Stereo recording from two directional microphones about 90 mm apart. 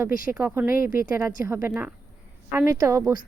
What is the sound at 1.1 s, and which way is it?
Speech, 30° right (ahead or behind).